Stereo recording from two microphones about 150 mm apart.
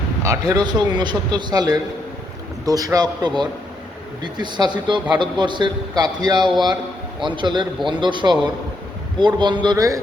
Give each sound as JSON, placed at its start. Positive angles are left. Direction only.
{"t": 0.2, "sound": "a man's voice", "side_deg": -20}